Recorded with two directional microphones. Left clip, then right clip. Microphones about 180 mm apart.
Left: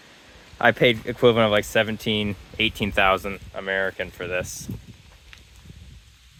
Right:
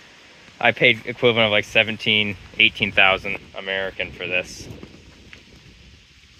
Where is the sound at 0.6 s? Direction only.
35° left (ahead or behind); by 4.5 s 20° left (ahead or behind).